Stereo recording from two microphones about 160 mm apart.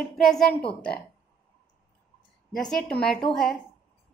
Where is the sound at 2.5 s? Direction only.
Centre (ahead or behind).